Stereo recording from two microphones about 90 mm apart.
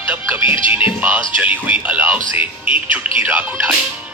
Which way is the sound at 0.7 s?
20° right (ahead or behind).